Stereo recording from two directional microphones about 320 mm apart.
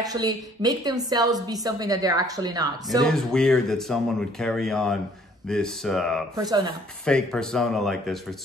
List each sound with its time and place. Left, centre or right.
0.0 s a woman's voice: centre
3.0 s speech: centre
6.3 s a woman's voice: centre
7.1 s speech: centre